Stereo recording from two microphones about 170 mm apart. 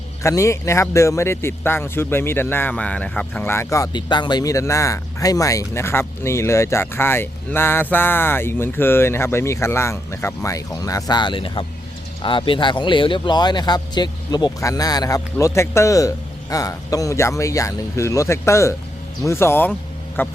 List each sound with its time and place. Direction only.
0.2 s speech: 15° left (ahead or behind)